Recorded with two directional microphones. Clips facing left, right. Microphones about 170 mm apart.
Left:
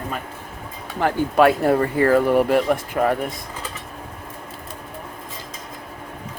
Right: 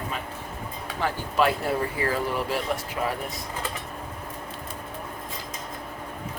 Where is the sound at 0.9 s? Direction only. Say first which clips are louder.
Left 7 dB; 55° left (ahead or behind).